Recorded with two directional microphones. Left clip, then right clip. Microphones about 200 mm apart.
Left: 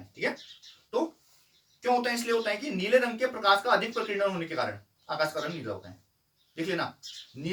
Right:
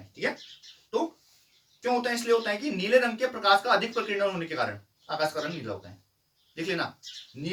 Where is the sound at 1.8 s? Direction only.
10° left (ahead or behind).